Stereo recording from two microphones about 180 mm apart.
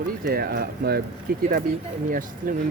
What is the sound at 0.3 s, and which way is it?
Speech, 55° right (ahead or behind).